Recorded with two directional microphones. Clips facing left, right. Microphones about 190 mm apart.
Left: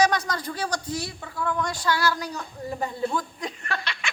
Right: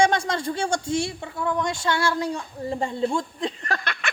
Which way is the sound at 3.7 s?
55° right (ahead or behind).